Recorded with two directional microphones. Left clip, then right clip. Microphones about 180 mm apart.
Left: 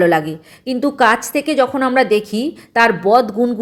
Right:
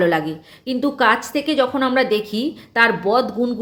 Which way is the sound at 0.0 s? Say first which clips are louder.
Left 4 dB; 35° left (ahead or behind).